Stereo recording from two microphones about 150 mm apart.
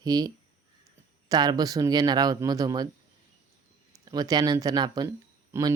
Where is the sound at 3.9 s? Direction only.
25° right (ahead or behind).